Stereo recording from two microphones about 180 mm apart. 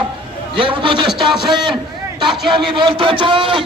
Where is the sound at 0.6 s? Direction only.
30° right (ahead or behind).